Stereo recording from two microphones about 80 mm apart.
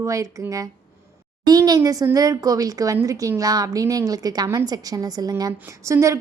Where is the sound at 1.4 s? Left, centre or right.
Right.